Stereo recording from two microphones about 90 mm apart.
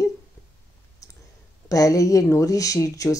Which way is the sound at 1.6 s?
40° left (ahead or behind).